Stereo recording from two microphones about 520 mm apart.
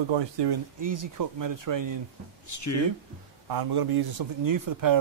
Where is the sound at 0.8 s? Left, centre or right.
Right.